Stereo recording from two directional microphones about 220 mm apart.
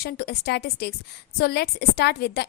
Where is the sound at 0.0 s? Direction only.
45° left (ahead or behind).